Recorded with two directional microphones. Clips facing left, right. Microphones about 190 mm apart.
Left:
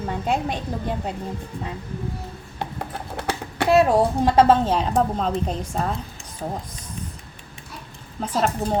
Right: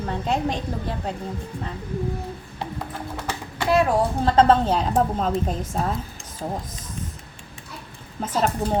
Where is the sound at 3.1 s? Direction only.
65° left (ahead or behind).